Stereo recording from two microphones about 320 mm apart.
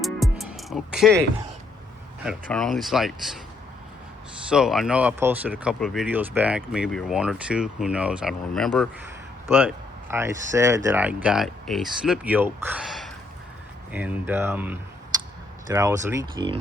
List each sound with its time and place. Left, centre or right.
0.0 s music: centre
2.2 s speech: centre
4.4 s speech: centre